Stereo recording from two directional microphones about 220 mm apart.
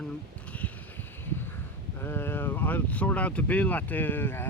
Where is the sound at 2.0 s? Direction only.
10° left (ahead or behind).